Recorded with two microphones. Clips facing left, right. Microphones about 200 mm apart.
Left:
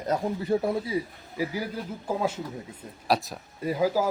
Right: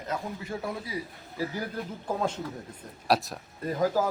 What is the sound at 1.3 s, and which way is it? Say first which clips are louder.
A man's voice: left 2 dB; 10° left (ahead or behind).